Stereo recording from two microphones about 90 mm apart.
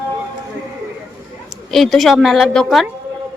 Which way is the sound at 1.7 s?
5° left (ahead or behind).